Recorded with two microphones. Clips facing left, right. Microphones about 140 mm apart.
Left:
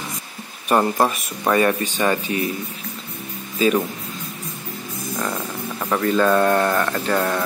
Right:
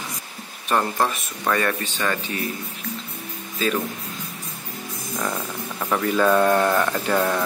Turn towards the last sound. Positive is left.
turn(degrees=-5)  # may be behind; listen again after turning